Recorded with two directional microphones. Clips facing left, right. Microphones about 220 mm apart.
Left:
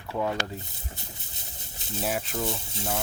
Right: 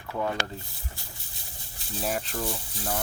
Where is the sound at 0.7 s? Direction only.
20° left (ahead or behind).